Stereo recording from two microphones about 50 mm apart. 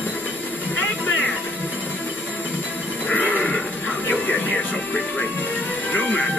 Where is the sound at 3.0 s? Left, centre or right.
Left.